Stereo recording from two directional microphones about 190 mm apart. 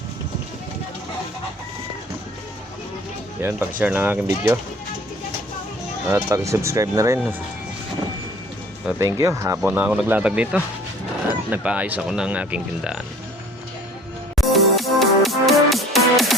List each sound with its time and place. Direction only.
3.4 s speech: 10° right (ahead or behind)
6.1 s speech: 15° right (ahead or behind)
8.9 s speech: 15° right (ahead or behind)
14.3 s music: centre (ahead or behind)